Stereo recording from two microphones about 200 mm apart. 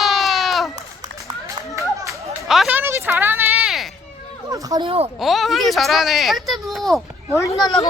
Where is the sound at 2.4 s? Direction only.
Centre (ahead or behind).